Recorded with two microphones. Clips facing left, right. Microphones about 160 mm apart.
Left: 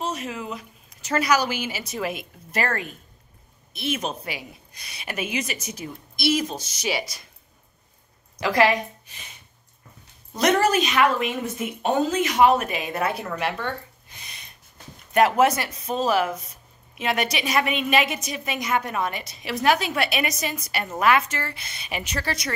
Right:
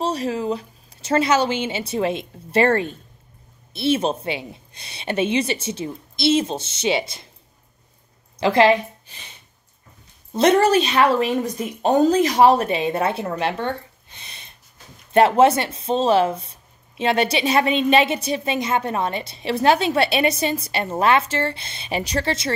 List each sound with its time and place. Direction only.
0.0 s speech: 30° right (ahead or behind)
8.4 s speech: 25° right (ahead or behind)
10.3 s speech: 30° right (ahead or behind)